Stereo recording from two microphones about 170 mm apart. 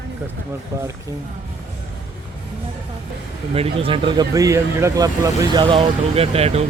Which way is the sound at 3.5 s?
35° right (ahead or behind).